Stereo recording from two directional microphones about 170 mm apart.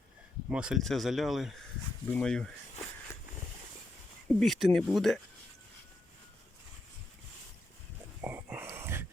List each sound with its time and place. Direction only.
0.5 s speech: 5° right (ahead or behind)
4.4 s speech: centre (ahead or behind)
8.2 s a sound: 10° right (ahead or behind)